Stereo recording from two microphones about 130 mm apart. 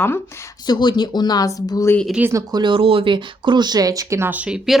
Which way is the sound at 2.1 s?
10° right (ahead or behind).